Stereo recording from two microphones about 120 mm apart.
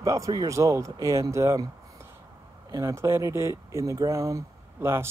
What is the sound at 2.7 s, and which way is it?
Speech, 30° right (ahead or behind).